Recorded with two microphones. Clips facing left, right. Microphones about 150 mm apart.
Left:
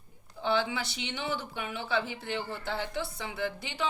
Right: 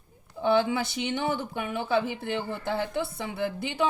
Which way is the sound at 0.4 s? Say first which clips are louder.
Right 6 dB; 50° right (ahead or behind).